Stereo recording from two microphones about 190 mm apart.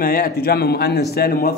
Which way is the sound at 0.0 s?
50° left (ahead or behind).